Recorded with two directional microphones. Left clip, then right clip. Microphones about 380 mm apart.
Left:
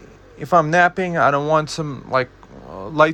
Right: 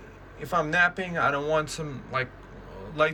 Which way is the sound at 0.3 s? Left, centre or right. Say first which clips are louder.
Left 9 dB; centre.